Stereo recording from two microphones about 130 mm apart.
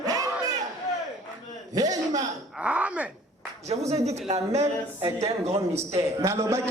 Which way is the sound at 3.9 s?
55° right (ahead or behind).